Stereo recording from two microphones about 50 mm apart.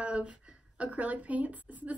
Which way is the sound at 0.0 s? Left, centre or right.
Right.